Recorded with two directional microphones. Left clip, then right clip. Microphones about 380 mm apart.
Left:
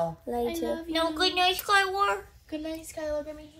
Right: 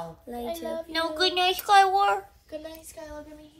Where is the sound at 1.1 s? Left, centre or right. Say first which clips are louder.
Right 2 dB; centre.